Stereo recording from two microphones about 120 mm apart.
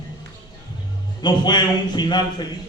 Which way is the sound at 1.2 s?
40° left (ahead or behind).